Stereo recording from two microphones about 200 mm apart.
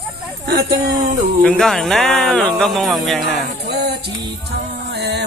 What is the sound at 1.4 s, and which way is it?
Speech, centre (ahead or behind).